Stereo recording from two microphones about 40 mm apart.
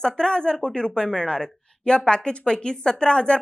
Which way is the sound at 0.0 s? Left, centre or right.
Left.